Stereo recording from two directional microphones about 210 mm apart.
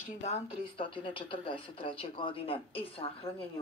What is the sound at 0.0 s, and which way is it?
Speech, 35° left (ahead or behind).